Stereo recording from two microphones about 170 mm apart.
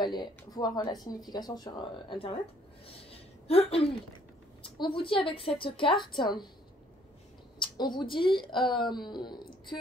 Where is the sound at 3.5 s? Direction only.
35° left (ahead or behind).